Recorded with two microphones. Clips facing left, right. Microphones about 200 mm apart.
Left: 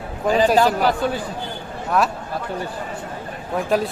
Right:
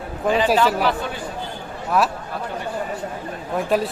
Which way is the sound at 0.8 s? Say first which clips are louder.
Left 3 dB; 40° left (ahead or behind).